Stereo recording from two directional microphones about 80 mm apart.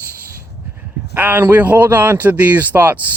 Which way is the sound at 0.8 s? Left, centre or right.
Right.